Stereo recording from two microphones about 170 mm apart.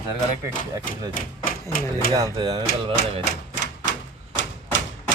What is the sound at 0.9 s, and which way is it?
Speech, 55° left (ahead or behind).